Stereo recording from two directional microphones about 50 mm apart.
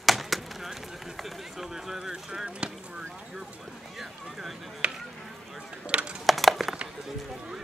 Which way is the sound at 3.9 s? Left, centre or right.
Centre.